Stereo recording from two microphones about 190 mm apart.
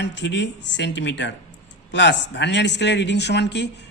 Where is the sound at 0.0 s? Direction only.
70° left (ahead or behind).